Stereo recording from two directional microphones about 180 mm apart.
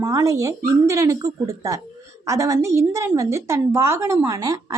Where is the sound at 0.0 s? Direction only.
15° right (ahead or behind).